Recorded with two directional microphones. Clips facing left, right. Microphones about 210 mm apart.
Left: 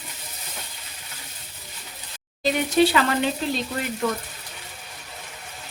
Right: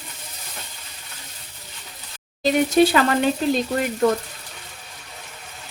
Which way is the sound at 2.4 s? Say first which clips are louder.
Right 3 dB; 45° right (ahead or behind).